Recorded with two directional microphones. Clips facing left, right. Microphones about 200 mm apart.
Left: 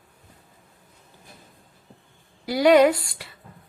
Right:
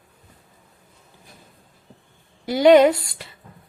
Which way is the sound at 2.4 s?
25° right (ahead or behind).